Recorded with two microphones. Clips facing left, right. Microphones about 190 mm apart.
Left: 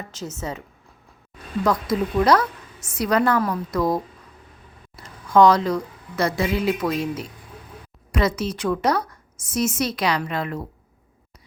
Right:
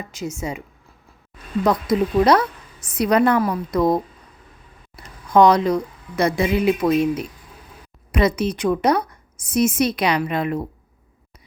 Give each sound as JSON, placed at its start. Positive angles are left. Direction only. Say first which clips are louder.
{"t": 0.0, "sound": "a woman's voice", "louder": "right 3 dB", "side_deg": -10}
{"t": 1.6, "sound": "a woman's voice", "louder": "right 3 dB", "side_deg": -20}
{"t": 5.0, "sound": "a woman's voice", "louder": "right 1 dB", "side_deg": -15}